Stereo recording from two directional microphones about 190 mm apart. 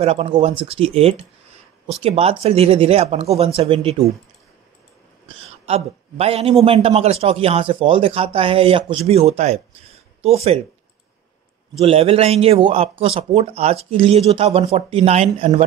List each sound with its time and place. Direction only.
0.0 s a man's voice: 30° right (ahead or behind)
5.4 s a man's voice: 30° right (ahead or behind)
11.8 s a man's voice: 30° right (ahead or behind)